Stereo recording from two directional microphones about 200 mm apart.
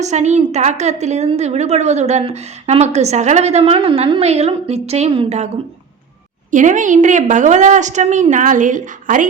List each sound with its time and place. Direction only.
0.0 s a woman's voice: 35° right (ahead or behind)
6.5 s a woman's voice: 40° right (ahead or behind)